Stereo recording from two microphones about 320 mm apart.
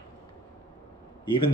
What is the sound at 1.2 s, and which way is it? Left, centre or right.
Speech, centre.